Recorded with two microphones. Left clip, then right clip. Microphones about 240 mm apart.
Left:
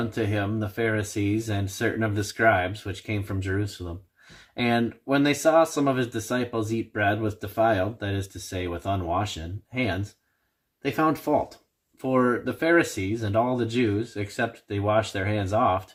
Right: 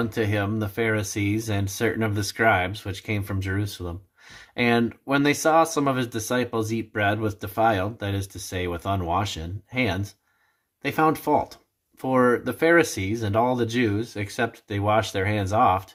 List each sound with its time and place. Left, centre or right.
0.2 s speech: right